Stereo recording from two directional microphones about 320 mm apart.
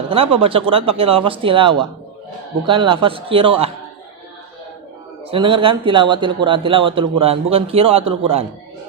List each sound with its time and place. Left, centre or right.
0.1 s speech: centre
5.3 s speech: centre